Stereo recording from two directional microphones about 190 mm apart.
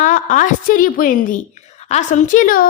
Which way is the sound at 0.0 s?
45° left (ahead or behind).